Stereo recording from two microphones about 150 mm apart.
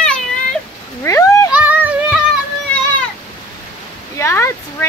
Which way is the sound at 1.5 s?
10° right (ahead or behind).